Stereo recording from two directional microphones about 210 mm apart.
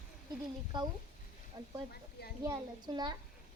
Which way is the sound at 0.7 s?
20° right (ahead or behind).